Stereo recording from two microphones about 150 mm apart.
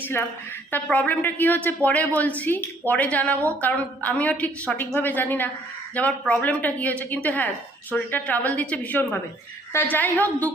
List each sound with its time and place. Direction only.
0.0 s a woman's voice: 15° left (ahead or behind)